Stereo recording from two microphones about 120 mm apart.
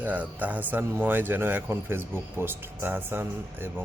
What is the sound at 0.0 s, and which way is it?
Speech, 15° right (ahead or behind).